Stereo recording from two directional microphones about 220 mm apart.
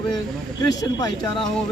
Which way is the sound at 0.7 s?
15° left (ahead or behind).